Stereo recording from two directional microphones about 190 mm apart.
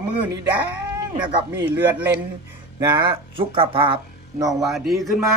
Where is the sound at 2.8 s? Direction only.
25° right (ahead or behind).